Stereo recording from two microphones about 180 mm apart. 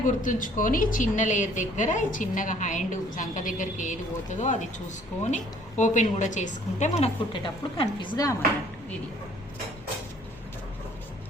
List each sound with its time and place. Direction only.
0.2 s a woman's voice: 50° left (ahead or behind); by 8.4 s 20° left (ahead or behind)